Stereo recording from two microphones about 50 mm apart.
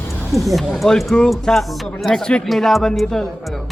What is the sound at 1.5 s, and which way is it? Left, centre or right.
Speech, centre.